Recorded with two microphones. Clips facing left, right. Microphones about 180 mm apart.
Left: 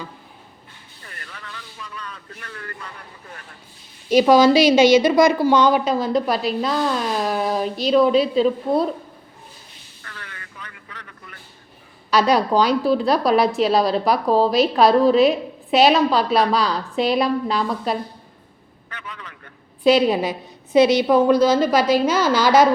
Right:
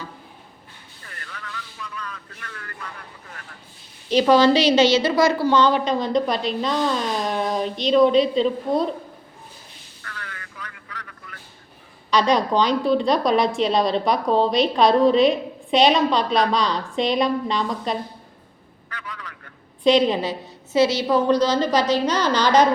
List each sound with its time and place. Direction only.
2.0 s speech: 25° left (ahead or behind)
4.1 s a woman's voice: 10° left (ahead or behind)
10.0 s a sound: 25° left (ahead or behind)
12.1 s a woman's voice: 5° left (ahead or behind)
18.9 s a man's voice: 25° left (ahead or behind)
19.8 s a woman's voice: 5° left (ahead or behind)